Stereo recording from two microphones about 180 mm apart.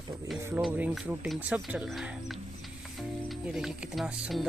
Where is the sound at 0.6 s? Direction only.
5° right (ahead or behind).